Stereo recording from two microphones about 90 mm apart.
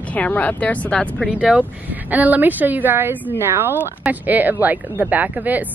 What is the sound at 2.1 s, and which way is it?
Speech, 20° right (ahead or behind).